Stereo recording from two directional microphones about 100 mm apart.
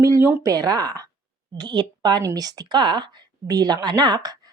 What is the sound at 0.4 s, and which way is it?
A woman's voice, 40° right (ahead or behind).